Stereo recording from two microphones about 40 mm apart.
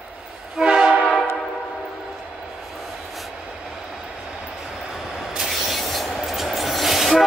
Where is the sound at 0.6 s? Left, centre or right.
Centre.